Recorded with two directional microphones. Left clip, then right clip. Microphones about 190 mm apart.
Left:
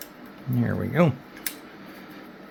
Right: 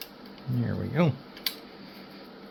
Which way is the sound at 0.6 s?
20° left (ahead or behind).